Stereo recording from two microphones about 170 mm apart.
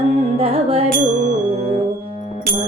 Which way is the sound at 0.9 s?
45° right (ahead or behind).